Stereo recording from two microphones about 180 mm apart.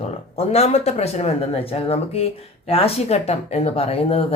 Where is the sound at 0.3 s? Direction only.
35° left (ahead or behind).